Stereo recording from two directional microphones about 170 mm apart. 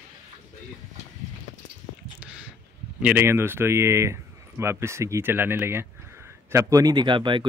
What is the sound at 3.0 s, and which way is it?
Speech, 15° right (ahead or behind).